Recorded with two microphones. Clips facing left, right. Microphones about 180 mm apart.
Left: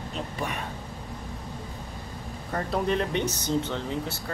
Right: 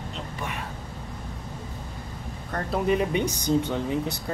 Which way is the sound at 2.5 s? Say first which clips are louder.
Right 2 dB; 5° right (ahead or behind).